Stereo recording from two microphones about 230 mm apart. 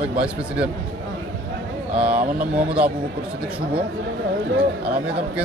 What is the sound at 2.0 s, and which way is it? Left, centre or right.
Speech, centre.